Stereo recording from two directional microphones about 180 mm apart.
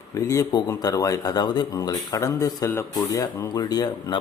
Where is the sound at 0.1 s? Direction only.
20° left (ahead or behind).